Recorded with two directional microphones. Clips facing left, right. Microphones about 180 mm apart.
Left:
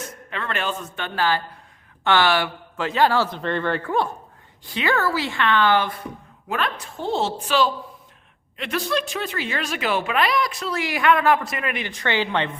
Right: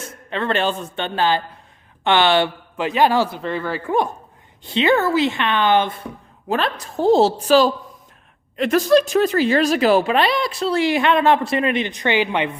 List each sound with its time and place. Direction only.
0.0 s a man's voice: 30° right (ahead or behind); by 3.8 s 5° right (ahead or behind)
3.8 s speech: 15° right (ahead or behind)
6.5 s a woman's voice: 35° right (ahead or behind); by 12.5 s 15° right (ahead or behind)